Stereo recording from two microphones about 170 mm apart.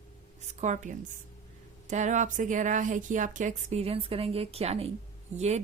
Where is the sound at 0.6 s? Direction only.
45° right (ahead or behind).